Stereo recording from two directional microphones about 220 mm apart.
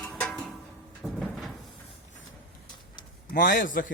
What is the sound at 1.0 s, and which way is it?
Cupboard open or close, centre (ahead or behind).